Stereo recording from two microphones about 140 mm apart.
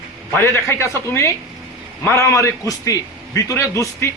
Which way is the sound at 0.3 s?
15° left (ahead or behind).